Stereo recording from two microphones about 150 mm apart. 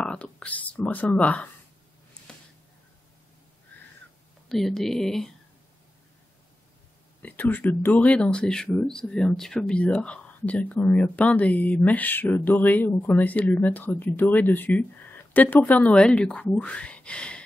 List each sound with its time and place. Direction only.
0.0 s speech: 5° left (ahead or behind)
2.3 s a sound: 5° left (ahead or behind)
4.5 s speech: centre (ahead or behind)
7.2 s speech: 10° left (ahead or behind)